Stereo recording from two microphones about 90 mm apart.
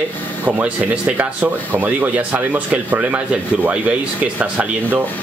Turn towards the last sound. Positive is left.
turn(degrees=-15)  # may be behind; listen again after turning